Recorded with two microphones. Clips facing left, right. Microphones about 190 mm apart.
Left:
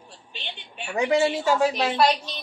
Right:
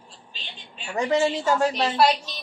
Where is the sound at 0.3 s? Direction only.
65° left (ahead or behind).